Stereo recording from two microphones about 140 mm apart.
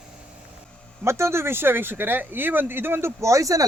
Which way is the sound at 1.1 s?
20° right (ahead or behind).